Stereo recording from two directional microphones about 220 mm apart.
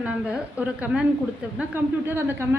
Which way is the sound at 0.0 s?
5° right (ahead or behind).